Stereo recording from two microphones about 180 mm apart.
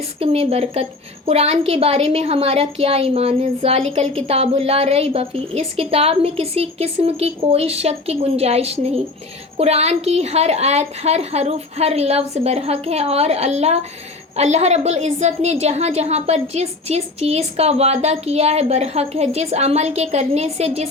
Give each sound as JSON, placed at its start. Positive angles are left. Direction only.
{"t": 0.2, "sound": "a woman's voice", "side_deg": -35}